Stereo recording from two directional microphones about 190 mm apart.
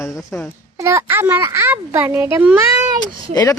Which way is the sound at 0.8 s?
15° right (ahead or behind).